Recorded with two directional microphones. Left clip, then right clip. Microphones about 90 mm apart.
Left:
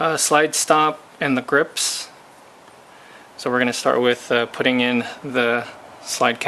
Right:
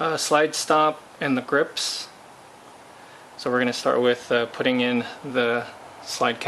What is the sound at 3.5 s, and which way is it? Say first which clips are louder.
Speech: left 3 dB; 35° left (ahead or behind).